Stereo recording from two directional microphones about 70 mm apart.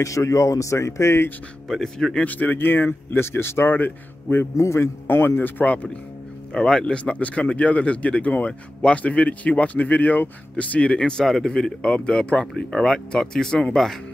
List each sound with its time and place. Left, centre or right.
0.0 s speech: left
1.7 s speech: centre
2.2 s speech: left
4.6 s speech: left
5.0 s speech: left
6.5 s speech: centre